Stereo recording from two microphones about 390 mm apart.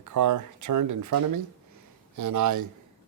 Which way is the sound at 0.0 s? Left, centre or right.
Right.